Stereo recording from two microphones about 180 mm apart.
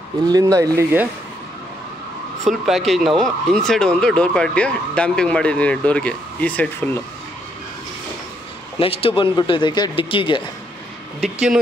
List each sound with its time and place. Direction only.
0.3 s speech: 20° right (ahead or behind)
2.4 s speech: centre (ahead or behind)
8.7 s speech: 30° left (ahead or behind)